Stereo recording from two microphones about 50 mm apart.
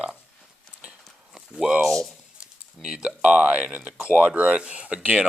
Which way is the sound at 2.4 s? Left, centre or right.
Centre.